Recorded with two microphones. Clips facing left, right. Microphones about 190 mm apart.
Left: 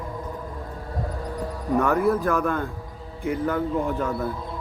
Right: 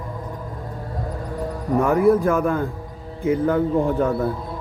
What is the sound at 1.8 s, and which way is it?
Speech, 25° right (ahead or behind).